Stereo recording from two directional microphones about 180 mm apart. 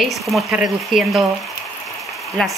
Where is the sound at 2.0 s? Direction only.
Centre (ahead or behind).